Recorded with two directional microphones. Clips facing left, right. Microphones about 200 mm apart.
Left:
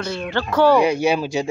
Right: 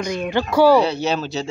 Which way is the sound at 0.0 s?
15° right (ahead or behind).